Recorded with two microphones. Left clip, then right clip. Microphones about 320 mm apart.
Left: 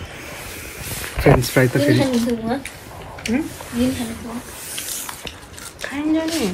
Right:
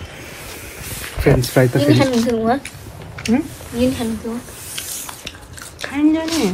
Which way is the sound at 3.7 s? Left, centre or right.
Centre.